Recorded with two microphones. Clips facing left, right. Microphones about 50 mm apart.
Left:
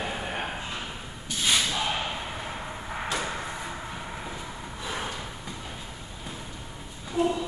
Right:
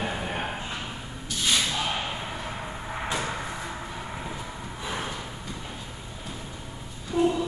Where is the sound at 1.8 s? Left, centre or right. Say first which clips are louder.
Even; centre.